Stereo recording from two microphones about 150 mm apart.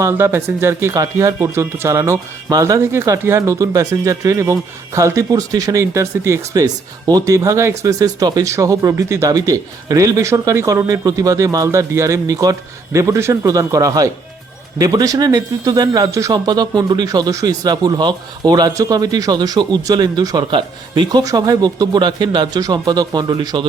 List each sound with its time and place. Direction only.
0.0 s speech: 15° right (ahead or behind)